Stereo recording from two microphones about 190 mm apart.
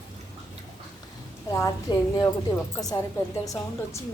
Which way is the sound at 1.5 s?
20° left (ahead or behind).